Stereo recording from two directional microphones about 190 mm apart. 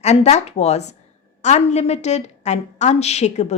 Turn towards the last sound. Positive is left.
turn(degrees=35)  # may be behind; listen again after turning